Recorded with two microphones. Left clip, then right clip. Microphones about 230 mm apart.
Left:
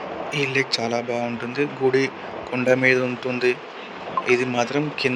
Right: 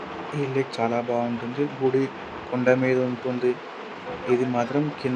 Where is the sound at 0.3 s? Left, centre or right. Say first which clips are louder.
Left 5 dB; left.